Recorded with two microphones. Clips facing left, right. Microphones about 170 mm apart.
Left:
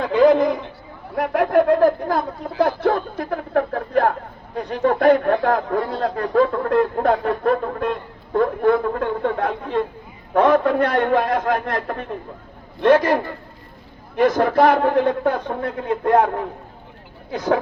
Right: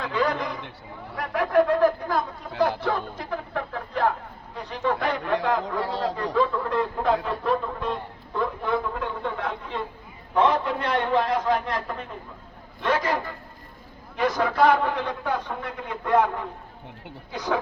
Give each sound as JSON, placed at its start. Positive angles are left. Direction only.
{"t": 0.1, "sound": "a man's voice", "side_deg": 55}
{"t": 14.2, "sound": "a man's voice", "side_deg": 50}